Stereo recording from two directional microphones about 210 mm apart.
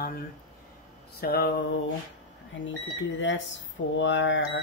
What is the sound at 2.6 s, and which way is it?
Speech, 60° left (ahead or behind).